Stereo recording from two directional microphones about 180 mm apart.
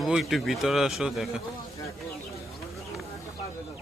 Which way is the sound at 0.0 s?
Centre (ahead or behind).